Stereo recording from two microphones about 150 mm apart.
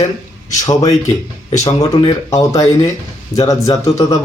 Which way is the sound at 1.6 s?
20° left (ahead or behind).